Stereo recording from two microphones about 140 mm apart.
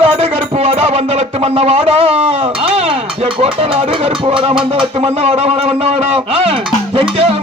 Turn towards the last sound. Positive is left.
turn(degrees=-45)  # may be behind; listen again after turning